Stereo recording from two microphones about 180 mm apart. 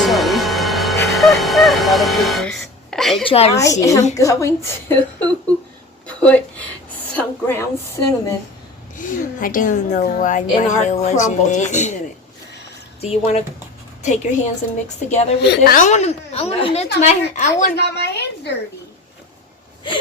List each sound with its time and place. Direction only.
0.0 s music: centre (ahead or behind)
3.2 s a woman's voice: 35° left (ahead or behind)
3.5 s a woman's voice: 15° left (ahead or behind)
9.0 s a woman's voice: 50° left (ahead or behind)
13.0 s a woman's voice: 35° left (ahead or behind)
15.4 s a woman's voice: 55° left (ahead or behind)
17.7 s a woman's voice: 65° left (ahead or behind)